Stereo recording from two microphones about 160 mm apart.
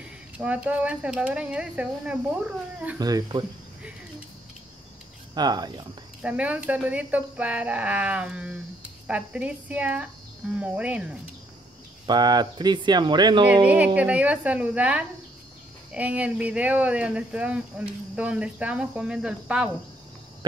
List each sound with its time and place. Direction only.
0.4 s speech: 10° right (ahead or behind)
3.0 s speech: 25° right (ahead or behind)
5.3 s speech: 25° right (ahead or behind)
6.2 s speech: 10° right (ahead or behind)
12.1 s speech: 25° right (ahead or behind)
13.7 s speech: 10° right (ahead or behind)